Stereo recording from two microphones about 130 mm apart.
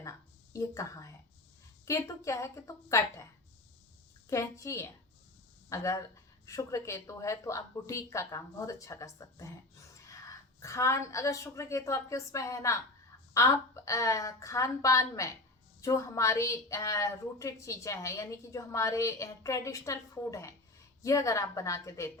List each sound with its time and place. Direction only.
0.0 s a sound: 25° left (ahead or behind)
1.8 s a woman's voice: 25° left (ahead or behind)
4.3 s a woman's voice: 25° left (ahead or behind)